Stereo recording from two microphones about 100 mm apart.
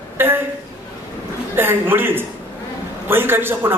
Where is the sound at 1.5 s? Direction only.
20° right (ahead or behind).